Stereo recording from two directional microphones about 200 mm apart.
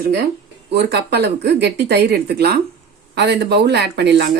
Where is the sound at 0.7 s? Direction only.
55° right (ahead or behind).